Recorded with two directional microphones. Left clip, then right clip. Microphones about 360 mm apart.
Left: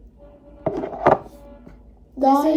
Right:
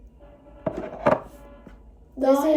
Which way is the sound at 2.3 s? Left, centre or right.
Centre.